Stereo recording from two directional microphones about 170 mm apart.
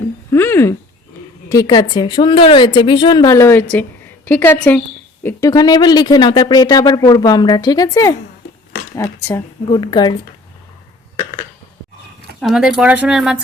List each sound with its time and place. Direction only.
0.3 s a sound: 15° left (ahead or behind)
1.5 s a woman's voice: 20° left (ahead or behind)
5.2 s speech: 20° left (ahead or behind)
12.4 s speech: centre (ahead or behind)